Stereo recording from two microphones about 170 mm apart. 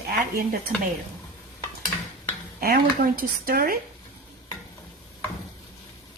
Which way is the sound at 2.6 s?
60° right (ahead or behind).